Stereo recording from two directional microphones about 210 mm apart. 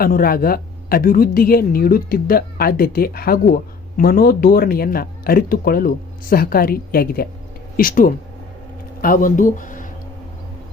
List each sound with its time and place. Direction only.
0.0 s speech: 45° left (ahead or behind)